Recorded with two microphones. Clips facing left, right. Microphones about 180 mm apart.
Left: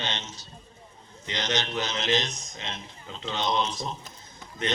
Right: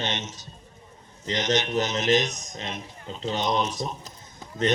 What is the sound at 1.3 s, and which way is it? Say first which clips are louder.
Speech: right 6 dB; 40° right (ahead or behind).